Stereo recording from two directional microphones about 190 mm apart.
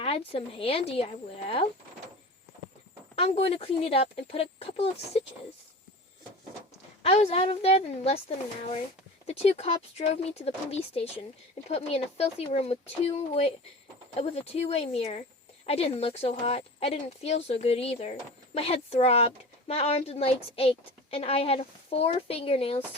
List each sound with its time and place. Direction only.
0.0 s speech: 30° left (ahead or behind)
3.2 s speech: 30° left (ahead or behind)
7.0 s speech: 30° left (ahead or behind)
9.2 s speech: 35° left (ahead or behind)